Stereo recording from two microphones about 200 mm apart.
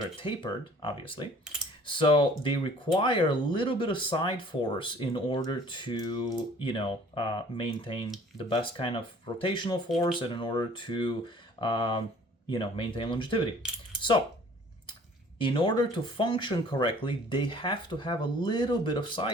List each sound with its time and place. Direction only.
0.2 s speech: 25° left (ahead or behind)
15.4 s speech: 25° left (ahead or behind)